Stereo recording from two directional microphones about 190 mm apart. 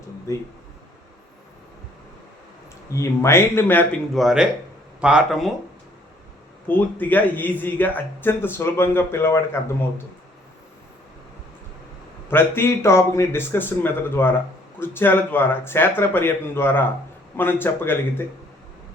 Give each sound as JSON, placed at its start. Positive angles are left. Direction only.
{"t": 0.3, "sound": "speech", "side_deg": 15}
{"t": 2.9, "sound": "speech", "side_deg": 15}
{"t": 4.2, "sound": "speech", "side_deg": 0}
{"t": 6.7, "sound": "speech", "side_deg": 10}
{"t": 12.3, "sound": "speech", "side_deg": 10}